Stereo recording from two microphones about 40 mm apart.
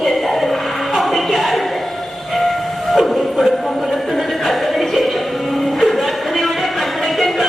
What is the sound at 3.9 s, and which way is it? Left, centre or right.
Music, centre.